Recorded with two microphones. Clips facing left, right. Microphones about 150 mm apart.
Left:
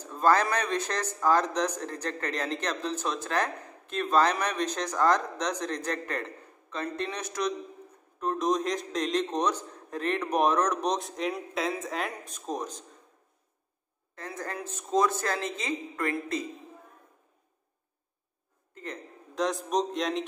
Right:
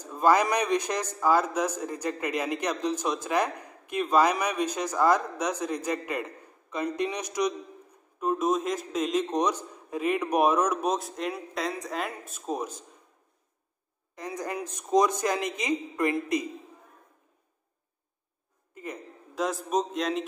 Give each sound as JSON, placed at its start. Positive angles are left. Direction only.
{"t": 0.0, "sound": "speech", "side_deg": -10}
{"t": 14.1, "sound": "speech", "side_deg": -15}
{"t": 18.8, "sound": "a man's voice", "side_deg": -5}